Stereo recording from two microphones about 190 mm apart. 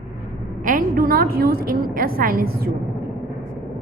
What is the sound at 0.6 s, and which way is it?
A woman's voice, 45° right (ahead or behind).